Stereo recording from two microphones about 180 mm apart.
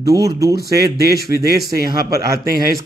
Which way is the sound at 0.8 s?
60° right (ahead or behind).